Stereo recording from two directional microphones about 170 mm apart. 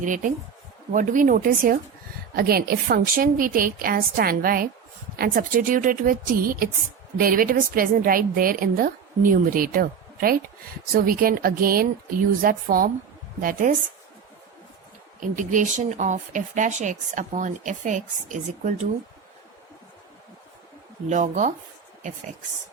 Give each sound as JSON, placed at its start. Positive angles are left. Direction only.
{"t": 0.0, "sound": "a woman's voice", "side_deg": -50}
{"t": 15.4, "sound": "speech", "side_deg": -50}
{"t": 21.1, "sound": "speech", "side_deg": -45}